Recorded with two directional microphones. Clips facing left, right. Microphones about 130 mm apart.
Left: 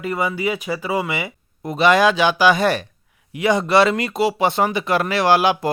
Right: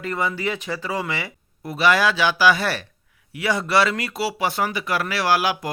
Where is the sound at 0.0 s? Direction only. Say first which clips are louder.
Left 3 dB; 10° left (ahead or behind).